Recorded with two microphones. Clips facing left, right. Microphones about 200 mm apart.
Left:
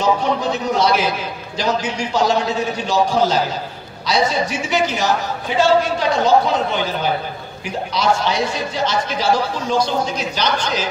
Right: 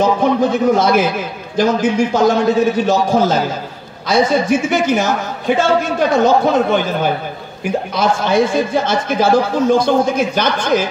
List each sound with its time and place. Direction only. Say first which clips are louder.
0.0 s a man's voice: right 5 dB; 50° right (ahead or behind)